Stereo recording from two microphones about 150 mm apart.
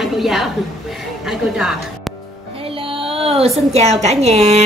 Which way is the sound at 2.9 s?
40° right (ahead or behind).